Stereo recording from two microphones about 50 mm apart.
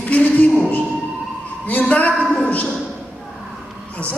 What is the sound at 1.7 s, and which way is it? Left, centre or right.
A woman's voice, left.